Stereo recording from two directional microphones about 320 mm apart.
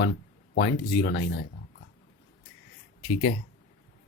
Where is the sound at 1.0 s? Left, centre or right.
Left.